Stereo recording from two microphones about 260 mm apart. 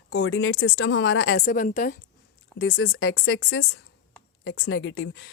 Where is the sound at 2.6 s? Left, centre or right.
Left.